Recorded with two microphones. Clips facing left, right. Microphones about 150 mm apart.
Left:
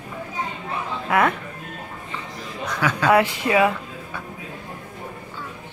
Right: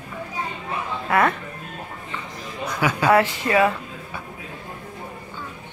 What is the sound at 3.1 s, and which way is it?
Speech, 15° left (ahead or behind).